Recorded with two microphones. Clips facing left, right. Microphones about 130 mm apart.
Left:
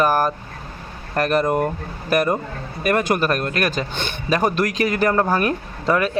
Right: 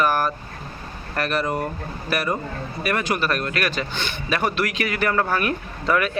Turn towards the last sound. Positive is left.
turn(degrees=30)  # may be behind; listen again after turning